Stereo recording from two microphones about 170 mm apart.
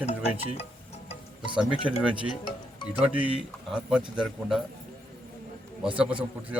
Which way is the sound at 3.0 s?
10° right (ahead or behind).